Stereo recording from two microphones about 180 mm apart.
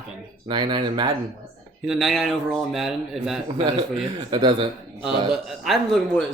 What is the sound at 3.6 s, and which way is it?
Speech, 25° right (ahead or behind).